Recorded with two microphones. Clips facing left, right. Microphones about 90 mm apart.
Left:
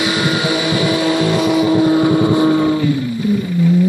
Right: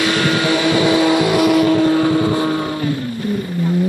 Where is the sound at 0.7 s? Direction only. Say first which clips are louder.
Right 2 dB; 20° right (ahead or behind); by 1.7 s 5° right (ahead or behind).